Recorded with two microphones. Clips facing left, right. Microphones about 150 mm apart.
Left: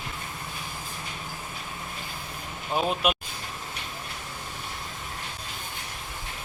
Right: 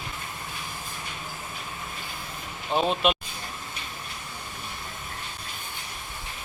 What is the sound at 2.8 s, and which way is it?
Speech, 5° left (ahead or behind).